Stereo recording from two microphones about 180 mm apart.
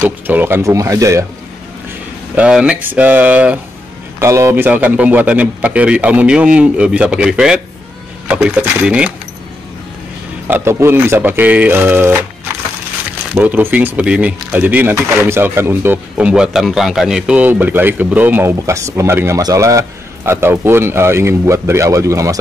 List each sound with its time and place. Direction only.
0.0 s speech: 10° right (ahead or behind)
2.3 s speech: 5° right (ahead or behind)
10.5 s speech: 15° right (ahead or behind)
13.3 s speech: 10° right (ahead or behind)